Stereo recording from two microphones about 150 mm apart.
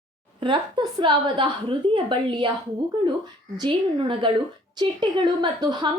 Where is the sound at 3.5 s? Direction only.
30° right (ahead or behind).